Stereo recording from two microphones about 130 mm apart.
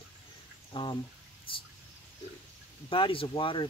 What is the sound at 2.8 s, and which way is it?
Speech, 40° left (ahead or behind).